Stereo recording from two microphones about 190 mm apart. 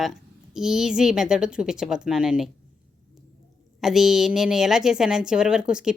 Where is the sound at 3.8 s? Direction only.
Centre (ahead or behind).